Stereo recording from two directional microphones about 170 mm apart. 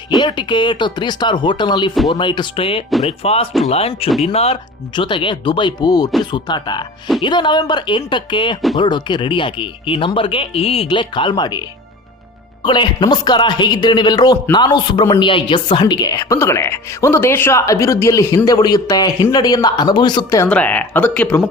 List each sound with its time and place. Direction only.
0.2 s speech: 25° left (ahead or behind)
12.6 s speech: 25° left (ahead or behind)
20.5 s speech: 10° left (ahead or behind)